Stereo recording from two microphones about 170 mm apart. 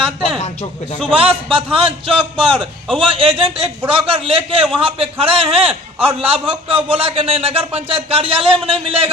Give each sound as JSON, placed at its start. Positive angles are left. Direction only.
{"t": 0.9, "sound": "a man's voice", "side_deg": -35}